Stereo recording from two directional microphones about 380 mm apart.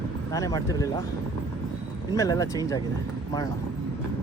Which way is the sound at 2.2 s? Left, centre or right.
Centre.